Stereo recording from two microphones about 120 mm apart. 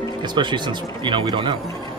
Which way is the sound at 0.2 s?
40° right (ahead or behind).